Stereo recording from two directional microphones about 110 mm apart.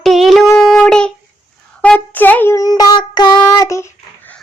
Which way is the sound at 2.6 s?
35° left (ahead or behind).